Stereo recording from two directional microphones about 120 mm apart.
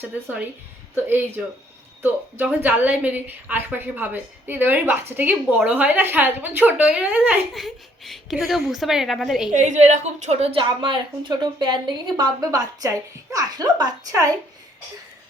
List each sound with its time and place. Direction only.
0.9 s a woman's voice: 15° right (ahead or behind)
9.5 s a woman's voice: 90° right; by 10.5 s 70° right (ahead or behind)
10.5 s a woman's voice: 45° right (ahead or behind)